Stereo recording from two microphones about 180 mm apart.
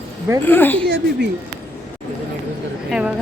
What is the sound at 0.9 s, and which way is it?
Speech, 70° right (ahead or behind).